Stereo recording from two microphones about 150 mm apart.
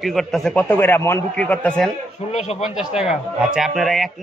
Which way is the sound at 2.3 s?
45° left (ahead or behind).